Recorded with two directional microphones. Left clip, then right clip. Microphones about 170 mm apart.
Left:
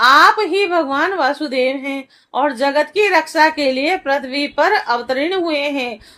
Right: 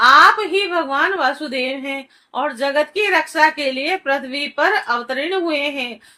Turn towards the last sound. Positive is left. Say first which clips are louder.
# left 2 dB
turn(degrees=45)  # may be behind; listen again after turning